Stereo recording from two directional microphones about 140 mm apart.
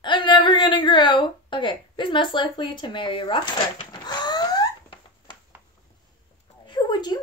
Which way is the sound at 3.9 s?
30° left (ahead or behind).